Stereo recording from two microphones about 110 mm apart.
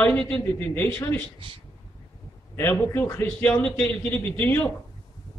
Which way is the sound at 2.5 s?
20° left (ahead or behind).